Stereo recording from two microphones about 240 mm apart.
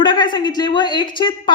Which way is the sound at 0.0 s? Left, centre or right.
Centre.